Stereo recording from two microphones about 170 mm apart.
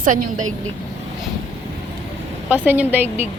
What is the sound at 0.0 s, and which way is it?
Speech, 50° right (ahead or behind).